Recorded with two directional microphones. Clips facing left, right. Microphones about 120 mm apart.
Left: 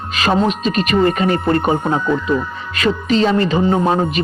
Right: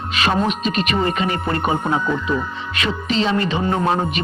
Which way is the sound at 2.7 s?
40° left (ahead or behind).